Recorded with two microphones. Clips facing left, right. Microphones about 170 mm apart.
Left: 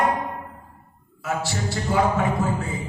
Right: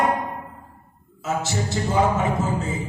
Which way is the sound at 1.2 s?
20° right (ahead or behind).